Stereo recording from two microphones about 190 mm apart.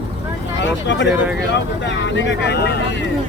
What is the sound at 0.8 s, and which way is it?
Speech, 70° left (ahead or behind).